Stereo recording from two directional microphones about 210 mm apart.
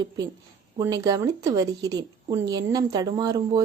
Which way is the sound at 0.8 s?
15° right (ahead or behind).